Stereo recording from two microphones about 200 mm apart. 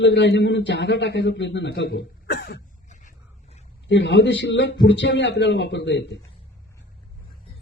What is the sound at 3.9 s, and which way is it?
Speech, 60° left (ahead or behind).